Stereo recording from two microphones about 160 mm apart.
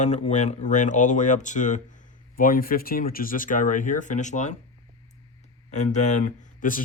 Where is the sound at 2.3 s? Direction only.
60° left (ahead or behind).